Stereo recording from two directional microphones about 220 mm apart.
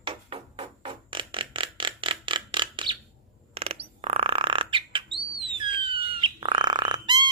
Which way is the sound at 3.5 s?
25° right (ahead or behind).